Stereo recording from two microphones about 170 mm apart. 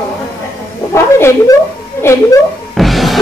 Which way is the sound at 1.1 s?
15° left (ahead or behind).